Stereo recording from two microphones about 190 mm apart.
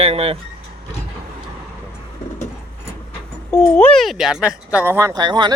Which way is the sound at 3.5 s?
10° left (ahead or behind).